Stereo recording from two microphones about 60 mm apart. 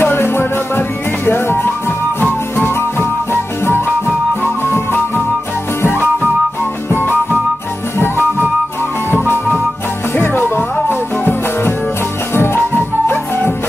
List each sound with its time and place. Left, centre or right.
0.0 s music: left
6.9 s music: left
10.1 s music: left